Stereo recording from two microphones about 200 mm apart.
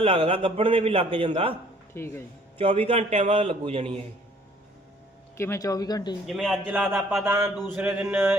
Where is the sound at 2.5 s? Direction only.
30° right (ahead or behind).